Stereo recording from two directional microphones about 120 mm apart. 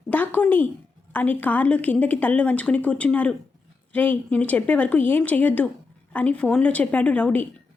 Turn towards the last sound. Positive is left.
turn(degrees=10)  # may be behind; listen again after turning